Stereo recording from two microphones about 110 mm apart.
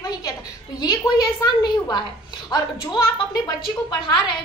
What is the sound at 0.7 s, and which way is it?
A woman's voice, 40° left (ahead or behind).